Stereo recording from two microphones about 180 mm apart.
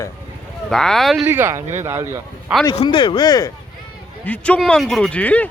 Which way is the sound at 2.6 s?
30° left (ahead or behind).